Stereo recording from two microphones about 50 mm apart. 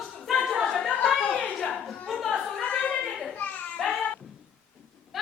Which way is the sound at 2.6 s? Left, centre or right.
Left.